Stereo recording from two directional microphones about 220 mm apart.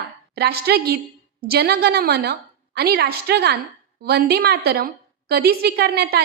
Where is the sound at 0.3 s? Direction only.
45° right (ahead or behind).